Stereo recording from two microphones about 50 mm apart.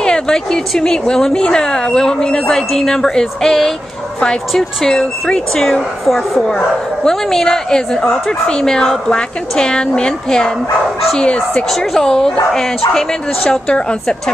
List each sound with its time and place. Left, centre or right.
0.0 s a woman's voice: centre
11.7 s a woman's voice: centre